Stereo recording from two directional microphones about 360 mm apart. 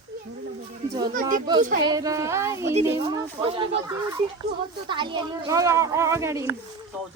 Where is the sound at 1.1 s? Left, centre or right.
Right.